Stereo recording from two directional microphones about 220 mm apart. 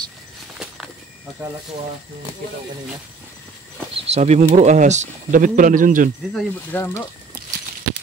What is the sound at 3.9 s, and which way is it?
Speech, 30° right (ahead or behind).